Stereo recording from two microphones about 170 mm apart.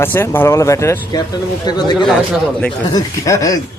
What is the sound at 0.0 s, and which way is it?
Speech, 10° left (ahead or behind).